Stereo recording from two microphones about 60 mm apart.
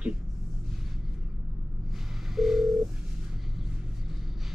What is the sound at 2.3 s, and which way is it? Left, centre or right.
Telephone dialing, centre.